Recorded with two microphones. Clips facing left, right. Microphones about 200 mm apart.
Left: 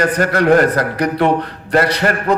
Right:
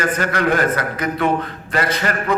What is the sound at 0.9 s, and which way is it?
A man's voice, 70° left (ahead or behind).